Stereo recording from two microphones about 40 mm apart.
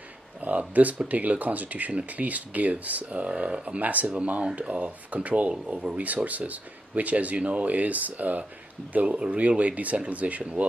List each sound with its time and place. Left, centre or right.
0.4 s speech: right
3.3 s speech: right
3.8 s speech: right
5.8 s speech: right
6.0 s speech: right
9.0 s speech: right